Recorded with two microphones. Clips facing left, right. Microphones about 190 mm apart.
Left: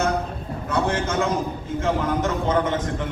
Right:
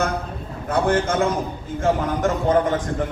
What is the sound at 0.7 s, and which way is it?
A man's voice, 55° right (ahead or behind).